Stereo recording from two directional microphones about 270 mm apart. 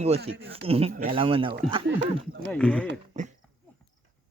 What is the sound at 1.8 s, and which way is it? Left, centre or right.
Speech, right.